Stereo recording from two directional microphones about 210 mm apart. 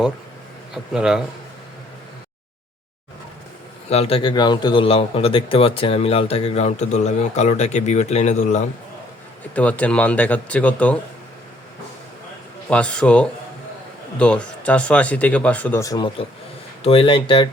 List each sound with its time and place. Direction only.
0.7 s speech: centre (ahead or behind)
3.8 s a man's voice: 30° left (ahead or behind)
9.6 s speech: 5° left (ahead or behind)
12.6 s a man's voice: 5° left (ahead or behind); by 17.5 s 25° left (ahead or behind)